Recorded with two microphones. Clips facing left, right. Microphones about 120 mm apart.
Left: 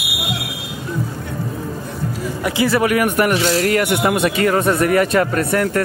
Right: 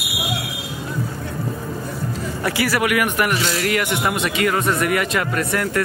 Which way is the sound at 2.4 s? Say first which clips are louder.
Left 4 dB; 20° left (ahead or behind).